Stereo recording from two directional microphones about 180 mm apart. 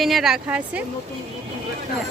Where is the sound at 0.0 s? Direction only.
Centre (ahead or behind).